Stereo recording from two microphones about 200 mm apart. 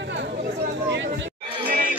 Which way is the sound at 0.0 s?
60° right (ahead or behind).